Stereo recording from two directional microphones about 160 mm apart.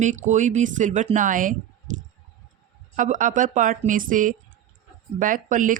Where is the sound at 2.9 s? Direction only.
55° right (ahead or behind).